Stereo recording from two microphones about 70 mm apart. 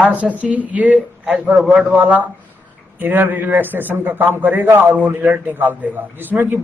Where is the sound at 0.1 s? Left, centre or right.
Right.